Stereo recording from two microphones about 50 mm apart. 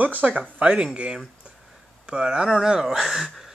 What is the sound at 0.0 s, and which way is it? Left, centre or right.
Speech, right.